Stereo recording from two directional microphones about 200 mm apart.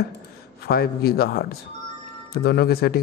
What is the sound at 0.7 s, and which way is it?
Speech, 50° left (ahead or behind).